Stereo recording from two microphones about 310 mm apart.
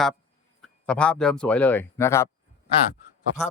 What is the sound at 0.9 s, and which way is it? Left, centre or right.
Speech, centre.